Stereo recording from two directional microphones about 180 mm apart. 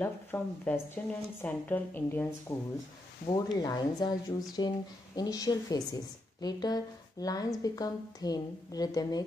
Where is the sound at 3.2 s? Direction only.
20° left (ahead or behind).